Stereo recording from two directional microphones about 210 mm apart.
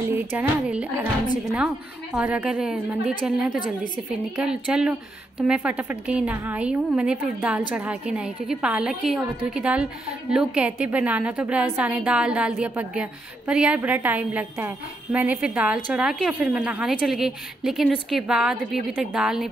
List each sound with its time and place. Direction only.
0.1 s a woman's voice: 10° right (ahead or behind)
2.1 s a woman's voice: 5° right (ahead or behind)